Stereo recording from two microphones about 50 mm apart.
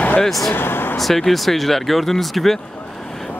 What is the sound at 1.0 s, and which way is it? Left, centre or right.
Speech, centre.